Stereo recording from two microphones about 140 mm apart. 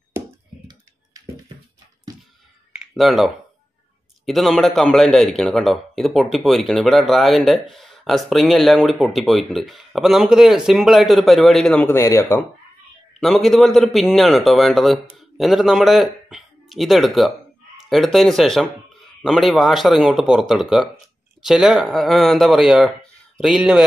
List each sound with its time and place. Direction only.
2.7 s a sound: centre (ahead or behind)
4.3 s a man's voice: centre (ahead or behind)
11.8 s speech: 20° left (ahead or behind)
13.2 s a man's voice: centre (ahead or behind)